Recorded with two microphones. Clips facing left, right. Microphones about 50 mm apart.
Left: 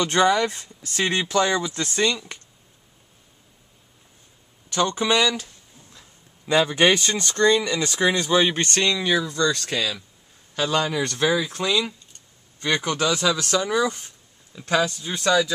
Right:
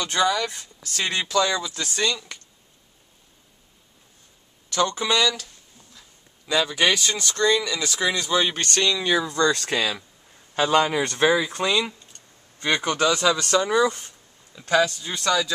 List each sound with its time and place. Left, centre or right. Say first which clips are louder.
0.0 s speech: left 4 dB; left
4.6 s speech: left 1 dB; centre
8.3 s speech: left 3 dB; centre
9.2 s speech: right 1 dB; right; by 11.9 s centre
12.5 s a sound: even; right
13.0 s speech: right 1 dB; centre
15.1 s speech: left 3 dB; centre